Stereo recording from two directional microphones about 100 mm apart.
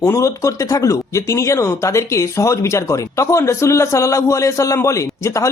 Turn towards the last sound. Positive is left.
turn(degrees=30)  # may be behind; listen again after turning